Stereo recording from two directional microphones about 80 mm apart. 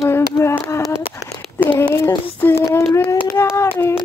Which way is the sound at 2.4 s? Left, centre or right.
Left.